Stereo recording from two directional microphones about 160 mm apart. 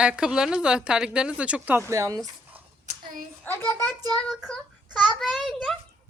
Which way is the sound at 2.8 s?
60° right (ahead or behind).